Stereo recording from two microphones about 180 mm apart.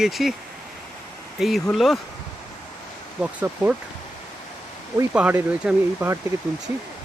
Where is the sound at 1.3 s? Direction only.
Centre (ahead or behind).